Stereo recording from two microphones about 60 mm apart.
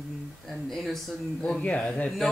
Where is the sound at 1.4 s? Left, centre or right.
Centre.